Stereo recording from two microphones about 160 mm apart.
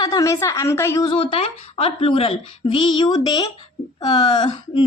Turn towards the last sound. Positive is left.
turn(degrees=30)  # may be behind; listen again after turning